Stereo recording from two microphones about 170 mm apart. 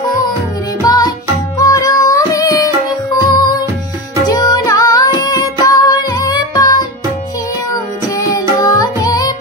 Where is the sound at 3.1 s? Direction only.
25° left (ahead or behind).